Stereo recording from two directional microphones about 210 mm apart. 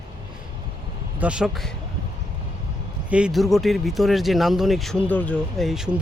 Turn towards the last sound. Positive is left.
turn(degrees=0)  # may be behind; listen again after turning